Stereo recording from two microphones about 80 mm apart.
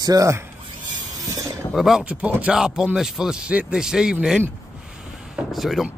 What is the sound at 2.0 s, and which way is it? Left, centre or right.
Speech, centre.